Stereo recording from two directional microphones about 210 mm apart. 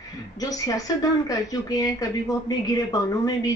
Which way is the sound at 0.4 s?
15° left (ahead or behind).